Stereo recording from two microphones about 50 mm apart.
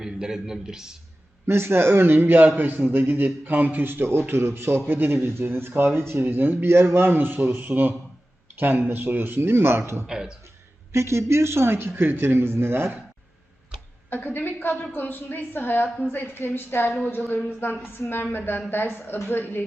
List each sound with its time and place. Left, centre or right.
0.0 s a man's voice: centre
1.5 s a man's voice: right
10.9 s a man's voice: right
14.1 s a woman's voice: left